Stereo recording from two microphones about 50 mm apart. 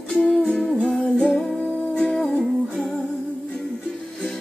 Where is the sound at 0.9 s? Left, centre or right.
Left.